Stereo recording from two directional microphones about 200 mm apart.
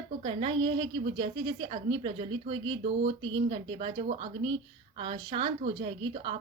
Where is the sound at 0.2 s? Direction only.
30° right (ahead or behind).